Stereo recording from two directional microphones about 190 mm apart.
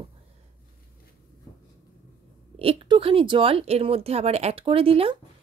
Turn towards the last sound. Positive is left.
turn(degrees=-30)  # may be behind; listen again after turning